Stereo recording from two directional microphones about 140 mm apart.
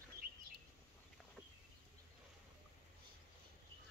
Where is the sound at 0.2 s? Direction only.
90° right.